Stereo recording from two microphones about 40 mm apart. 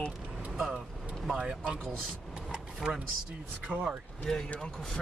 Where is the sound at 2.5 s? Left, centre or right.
Centre.